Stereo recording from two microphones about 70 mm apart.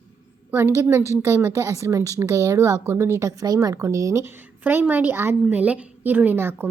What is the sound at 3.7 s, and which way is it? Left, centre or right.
Speech, right.